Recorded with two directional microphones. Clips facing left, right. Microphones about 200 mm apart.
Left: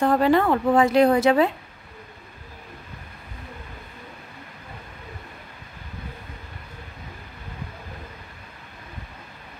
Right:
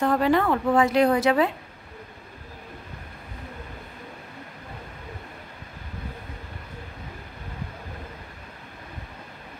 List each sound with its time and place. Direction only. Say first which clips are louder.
0.0 s a woman's voice: left 2 dB; 35° left (ahead or behind)